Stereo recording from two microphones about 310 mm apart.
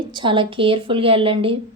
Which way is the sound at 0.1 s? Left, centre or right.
Centre.